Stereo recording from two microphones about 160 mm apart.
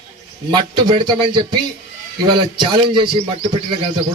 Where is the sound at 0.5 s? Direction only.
30° right (ahead or behind).